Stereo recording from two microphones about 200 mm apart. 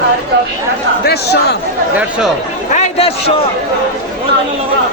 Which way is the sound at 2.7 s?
35° left (ahead or behind).